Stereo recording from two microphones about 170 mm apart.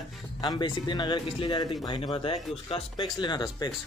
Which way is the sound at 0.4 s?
25° left (ahead or behind).